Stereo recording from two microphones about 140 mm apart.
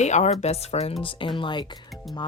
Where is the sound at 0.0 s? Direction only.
55° left (ahead or behind).